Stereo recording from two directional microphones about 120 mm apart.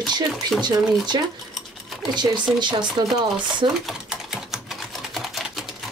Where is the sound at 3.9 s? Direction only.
5° right (ahead or behind).